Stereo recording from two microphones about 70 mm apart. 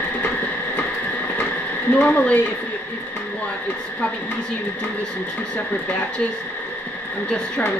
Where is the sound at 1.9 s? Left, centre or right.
Centre.